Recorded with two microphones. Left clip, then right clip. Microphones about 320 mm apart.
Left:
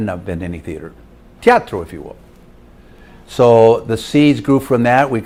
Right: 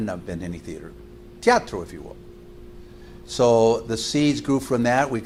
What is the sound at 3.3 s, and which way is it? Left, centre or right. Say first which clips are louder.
Speech: left 8 dB; left.